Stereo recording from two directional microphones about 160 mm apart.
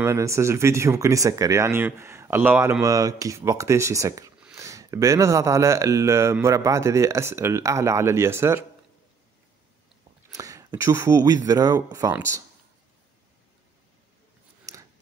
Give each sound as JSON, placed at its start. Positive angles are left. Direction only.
{"t": 0.0, "sound": "speech", "side_deg": -15}
{"t": 2.8, "sound": "speech", "side_deg": -20}
{"t": 10.3, "sound": "speech", "side_deg": -20}
{"t": 14.7, "sound": "scissors", "side_deg": -20}